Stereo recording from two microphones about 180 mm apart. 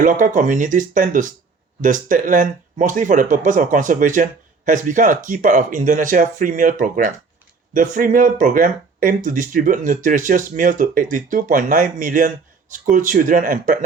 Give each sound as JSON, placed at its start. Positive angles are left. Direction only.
{"t": 0.0, "sound": "speech", "side_deg": -45}